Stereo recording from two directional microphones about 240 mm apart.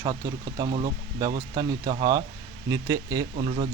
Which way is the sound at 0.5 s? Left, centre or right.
Centre.